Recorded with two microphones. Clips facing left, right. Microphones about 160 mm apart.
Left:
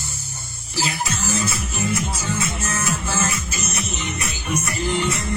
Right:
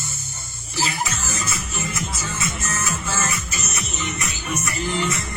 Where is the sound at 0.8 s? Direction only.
35° left (ahead or behind).